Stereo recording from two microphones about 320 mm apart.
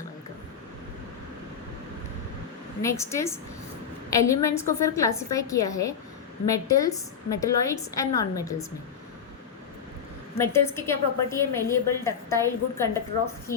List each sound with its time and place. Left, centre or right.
2.8 s a woman's voice: centre
10.3 s a woman's voice: centre